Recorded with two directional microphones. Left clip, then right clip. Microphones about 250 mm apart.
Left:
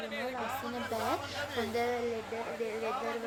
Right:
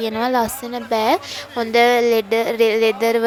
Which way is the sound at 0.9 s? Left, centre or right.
Right.